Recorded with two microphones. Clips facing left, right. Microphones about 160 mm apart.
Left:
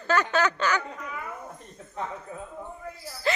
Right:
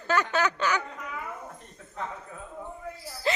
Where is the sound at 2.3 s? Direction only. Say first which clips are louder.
Left 5 dB; 20° left (ahead or behind).